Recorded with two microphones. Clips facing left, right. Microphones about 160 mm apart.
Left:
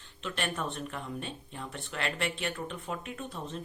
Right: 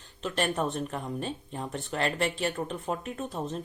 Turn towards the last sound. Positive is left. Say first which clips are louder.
# right 5 dB
turn(degrees=-40)  # may be behind; listen again after turning